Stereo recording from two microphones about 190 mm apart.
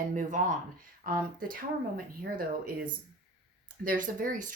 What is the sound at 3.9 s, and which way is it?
Speech, 45° right (ahead or behind).